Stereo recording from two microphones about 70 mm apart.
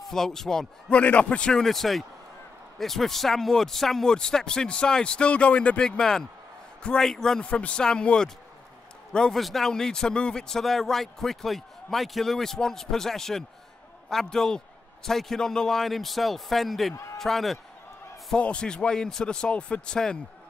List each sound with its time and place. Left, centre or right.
0.0 s speech: centre
0.8 s a man's voice: centre
16.9 s speech: left
17.2 s a man's voice: centre
18.3 s speech: centre